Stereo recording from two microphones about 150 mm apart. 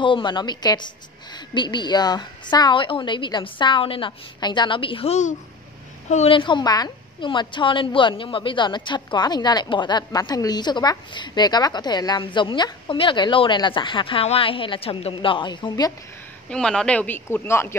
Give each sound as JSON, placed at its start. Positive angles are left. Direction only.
{"t": 0.0, "sound": "a woman's voice", "side_deg": 35}
{"t": 6.3, "sound": "a woman's voice", "side_deg": 30}
{"t": 16.4, "sound": "speech", "side_deg": 5}